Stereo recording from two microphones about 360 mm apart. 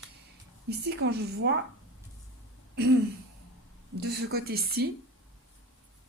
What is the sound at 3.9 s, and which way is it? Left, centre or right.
Speech, right.